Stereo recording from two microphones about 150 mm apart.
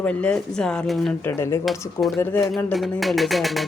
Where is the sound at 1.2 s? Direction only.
15° left (ahead or behind).